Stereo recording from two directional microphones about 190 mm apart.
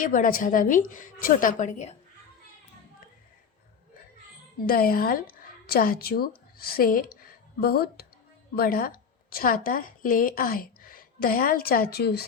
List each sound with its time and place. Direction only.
0.0 s a woman's voice: 45° left (ahead or behind)
4.6 s a woman's voice: 50° left (ahead or behind)